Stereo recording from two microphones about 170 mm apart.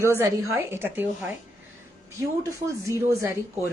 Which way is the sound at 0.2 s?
15° right (ahead or behind).